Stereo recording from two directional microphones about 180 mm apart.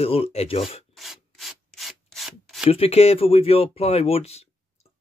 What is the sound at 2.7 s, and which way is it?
Speech, 35° left (ahead or behind).